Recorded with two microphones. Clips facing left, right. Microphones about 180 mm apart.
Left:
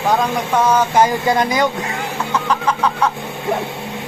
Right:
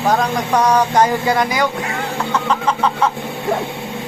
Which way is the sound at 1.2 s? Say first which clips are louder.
Left 1 dB; 20° left (ahead or behind).